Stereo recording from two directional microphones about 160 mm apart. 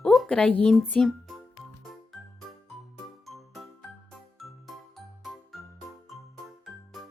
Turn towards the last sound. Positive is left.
turn(degrees=0)  # may be behind; listen again after turning